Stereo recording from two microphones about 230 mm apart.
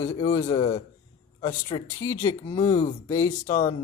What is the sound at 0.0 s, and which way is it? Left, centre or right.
Speech, centre.